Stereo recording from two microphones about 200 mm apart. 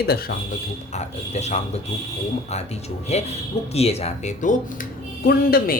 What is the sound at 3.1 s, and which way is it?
Speech, 30° left (ahead or behind).